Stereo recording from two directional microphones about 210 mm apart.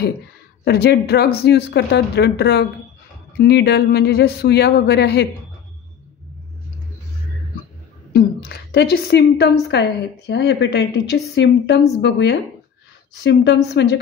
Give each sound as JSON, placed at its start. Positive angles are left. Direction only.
{"t": 0.7, "sound": "a woman's voice", "side_deg": 50}
{"t": 8.1, "sound": "a woman's voice", "side_deg": 50}